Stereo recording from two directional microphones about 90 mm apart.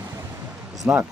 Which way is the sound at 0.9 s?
20° right (ahead or behind).